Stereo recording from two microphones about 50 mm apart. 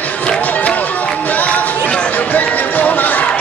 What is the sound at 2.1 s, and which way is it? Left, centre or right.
Music, left.